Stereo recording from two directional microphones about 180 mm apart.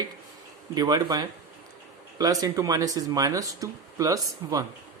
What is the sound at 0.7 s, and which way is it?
Speech, 20° right (ahead or behind).